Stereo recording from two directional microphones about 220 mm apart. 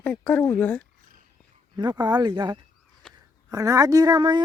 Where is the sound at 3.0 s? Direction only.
5° left (ahead or behind).